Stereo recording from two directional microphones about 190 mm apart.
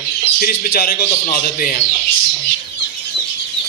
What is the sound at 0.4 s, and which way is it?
A man's voice, 55° left (ahead or behind).